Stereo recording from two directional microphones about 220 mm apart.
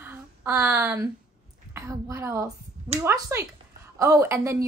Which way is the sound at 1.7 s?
15° right (ahead or behind).